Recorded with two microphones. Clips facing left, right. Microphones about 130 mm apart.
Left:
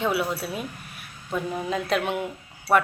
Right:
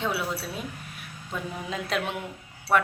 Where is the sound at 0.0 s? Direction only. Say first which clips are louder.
Left 4 dB; 5° left (ahead or behind).